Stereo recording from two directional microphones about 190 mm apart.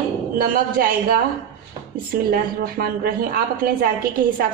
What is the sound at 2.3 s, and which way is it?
A woman's voice, 55° right (ahead or behind).